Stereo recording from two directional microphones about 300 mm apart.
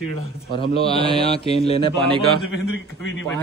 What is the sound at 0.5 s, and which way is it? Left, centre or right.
A man's voice, centre.